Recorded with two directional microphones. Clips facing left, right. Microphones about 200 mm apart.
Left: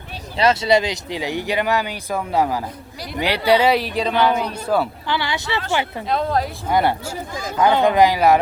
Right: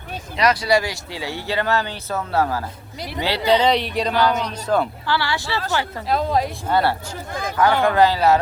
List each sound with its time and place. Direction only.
0.3 s speech: 25° left (ahead or behind)
6.1 s a woman's voice: centre (ahead or behind)
6.7 s speech: 15° left (ahead or behind)